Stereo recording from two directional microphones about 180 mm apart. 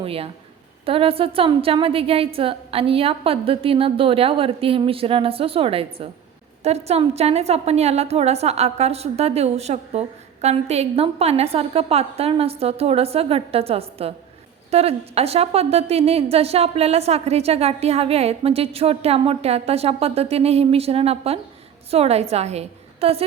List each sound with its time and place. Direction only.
0.0 s a woman's voice: 30° right (ahead or behind)